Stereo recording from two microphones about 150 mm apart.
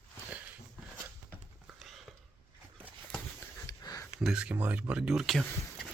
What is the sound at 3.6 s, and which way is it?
Sniff, 25° left (ahead or behind).